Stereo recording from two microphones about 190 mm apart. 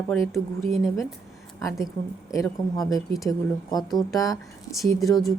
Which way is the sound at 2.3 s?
15° left (ahead or behind).